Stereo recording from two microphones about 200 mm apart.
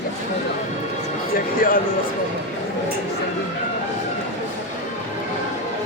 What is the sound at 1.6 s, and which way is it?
Speech, 45° left (ahead or behind).